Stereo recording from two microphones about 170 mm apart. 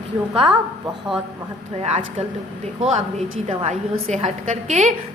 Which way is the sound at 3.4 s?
40° right (ahead or behind).